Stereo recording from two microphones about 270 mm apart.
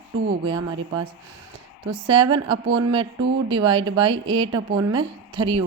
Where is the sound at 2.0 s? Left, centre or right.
Centre.